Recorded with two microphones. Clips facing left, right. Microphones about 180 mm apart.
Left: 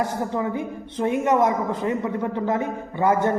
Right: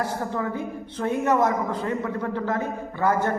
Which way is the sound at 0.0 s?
20° left (ahead or behind).